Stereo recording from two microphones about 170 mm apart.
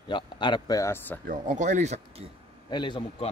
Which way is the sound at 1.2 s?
50° right (ahead or behind).